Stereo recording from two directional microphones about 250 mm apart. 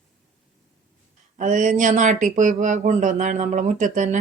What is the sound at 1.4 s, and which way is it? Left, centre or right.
A woman's voice, right.